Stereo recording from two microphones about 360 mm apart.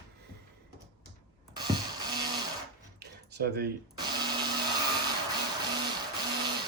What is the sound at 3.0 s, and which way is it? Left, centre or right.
Cutlery, right.